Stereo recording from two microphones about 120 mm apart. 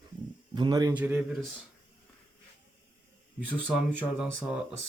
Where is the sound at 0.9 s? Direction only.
10° right (ahead or behind).